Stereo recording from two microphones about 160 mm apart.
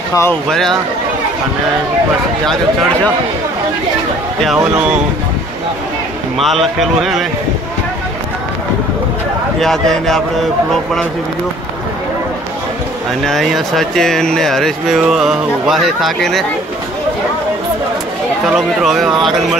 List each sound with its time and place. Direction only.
0.1 s speech: 15° left (ahead or behind)
0.5 s speech: centre (ahead or behind)
4.6 s speech: 5° right (ahead or behind)
6.3 s speech: centre (ahead or behind)
9.6 s speech: 5° left (ahead or behind)
13.2 s speech: centre (ahead or behind)
18.5 s speech: centre (ahead or behind)